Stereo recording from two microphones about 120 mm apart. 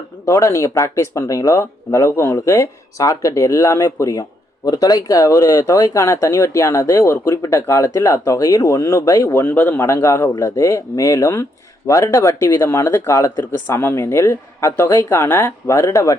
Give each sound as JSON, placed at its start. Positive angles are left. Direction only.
{"t": 0.3, "sound": "speech", "side_deg": 25}